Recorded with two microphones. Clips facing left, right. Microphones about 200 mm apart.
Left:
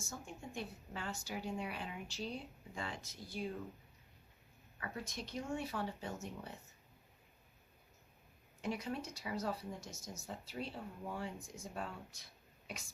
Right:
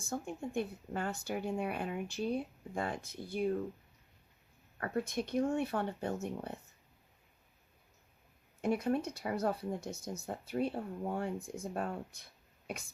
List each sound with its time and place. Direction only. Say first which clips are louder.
0.0 s speech: right 9 dB; 55° right (ahead or behind)
4.8 s speech: right 10 dB; 55° right (ahead or behind)
8.6 s speech: right 9 dB; 55° right (ahead or behind)